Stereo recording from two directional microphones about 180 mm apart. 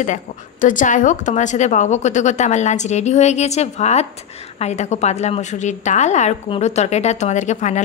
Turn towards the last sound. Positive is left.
turn(degrees=40)  # may be behind; listen again after turning